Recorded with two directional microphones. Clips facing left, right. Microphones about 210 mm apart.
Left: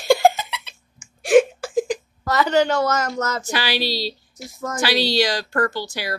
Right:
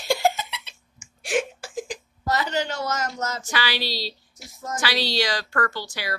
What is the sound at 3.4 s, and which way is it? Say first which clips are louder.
Speech: left 4 dB; 10° left (ahead or behind).